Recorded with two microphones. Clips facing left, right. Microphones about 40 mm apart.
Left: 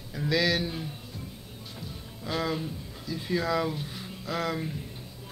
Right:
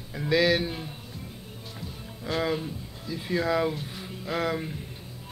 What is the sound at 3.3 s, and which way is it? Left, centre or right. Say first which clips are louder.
Speech: right 2 dB; centre.